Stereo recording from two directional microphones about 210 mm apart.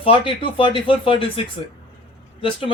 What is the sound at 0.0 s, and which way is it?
Speech, 25° left (ahead or behind).